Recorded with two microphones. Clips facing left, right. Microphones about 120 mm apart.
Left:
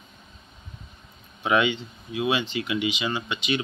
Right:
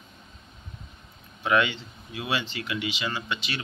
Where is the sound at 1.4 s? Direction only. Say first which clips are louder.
Left 2 dB; 5° left (ahead or behind).